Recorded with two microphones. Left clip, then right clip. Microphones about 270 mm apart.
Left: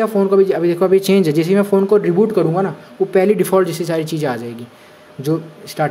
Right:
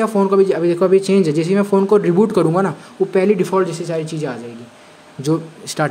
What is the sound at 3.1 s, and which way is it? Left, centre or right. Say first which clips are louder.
Speech: left 2 dB; centre.